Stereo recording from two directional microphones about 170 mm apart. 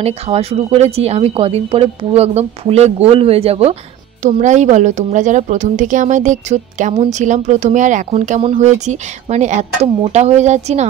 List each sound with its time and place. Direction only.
0.0 s a woman's voice: 35° right (ahead or behind)